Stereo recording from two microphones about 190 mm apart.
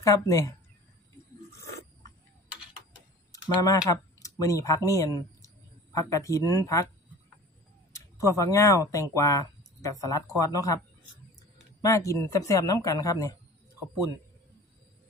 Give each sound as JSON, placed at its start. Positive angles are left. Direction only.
{"t": 0.0, "sound": "speech", "side_deg": 15}
{"t": 3.3, "sound": "typing", "side_deg": 20}
{"t": 3.9, "sound": "speech", "side_deg": 15}
{"t": 7.9, "sound": "speech", "side_deg": 15}
{"t": 11.8, "sound": "speech", "side_deg": 15}